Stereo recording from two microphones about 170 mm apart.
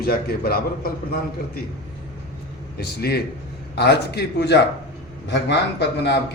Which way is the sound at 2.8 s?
70° left (ahead or behind).